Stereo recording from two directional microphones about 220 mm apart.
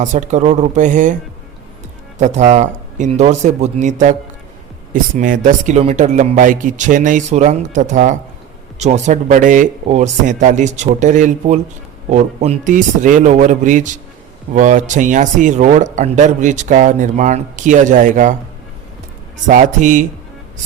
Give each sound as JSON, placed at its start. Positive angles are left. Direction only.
{"t": 0.0, "sound": "speech", "side_deg": -35}
{"t": 2.1, "sound": "speech", "side_deg": -30}
{"t": 5.2, "sound": "speech", "side_deg": -35}
{"t": 19.5, "sound": "speech", "side_deg": -35}